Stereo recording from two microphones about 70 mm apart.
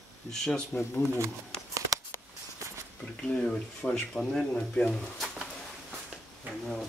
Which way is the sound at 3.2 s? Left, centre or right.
Centre.